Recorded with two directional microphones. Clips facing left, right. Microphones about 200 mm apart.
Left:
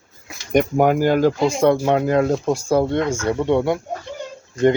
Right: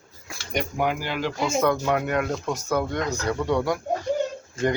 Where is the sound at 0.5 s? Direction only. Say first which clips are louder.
Left 10 dB; 50° left (ahead or behind).